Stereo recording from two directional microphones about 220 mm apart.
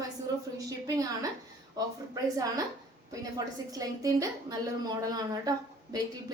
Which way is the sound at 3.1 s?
15° right (ahead or behind).